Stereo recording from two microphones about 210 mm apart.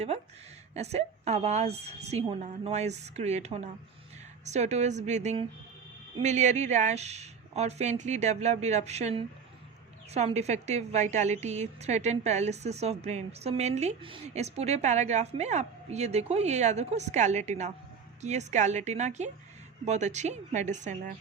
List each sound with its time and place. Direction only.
0.7 s a woman's voice: 30° right (ahead or behind)